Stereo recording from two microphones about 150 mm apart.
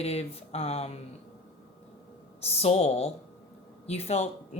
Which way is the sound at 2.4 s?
45° left (ahead or behind).